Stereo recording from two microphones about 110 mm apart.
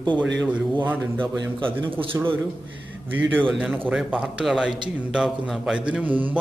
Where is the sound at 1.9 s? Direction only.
55° right (ahead or behind).